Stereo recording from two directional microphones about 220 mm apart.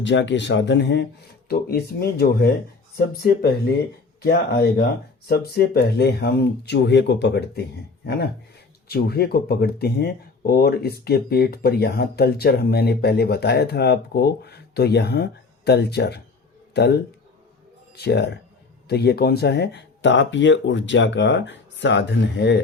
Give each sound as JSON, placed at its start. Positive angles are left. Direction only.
{"t": 0.0, "sound": "speech", "side_deg": 55}
{"t": 8.9, "sound": "speech", "side_deg": 45}